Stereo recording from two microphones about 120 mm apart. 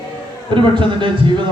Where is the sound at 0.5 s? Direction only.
45° right (ahead or behind).